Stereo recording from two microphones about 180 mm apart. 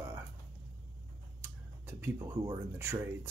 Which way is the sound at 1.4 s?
10° right (ahead or behind).